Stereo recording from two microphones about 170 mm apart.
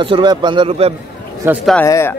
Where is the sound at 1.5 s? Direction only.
10° right (ahead or behind).